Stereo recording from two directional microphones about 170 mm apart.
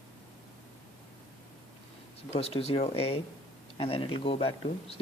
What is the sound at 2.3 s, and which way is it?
Speech, 35° left (ahead or behind).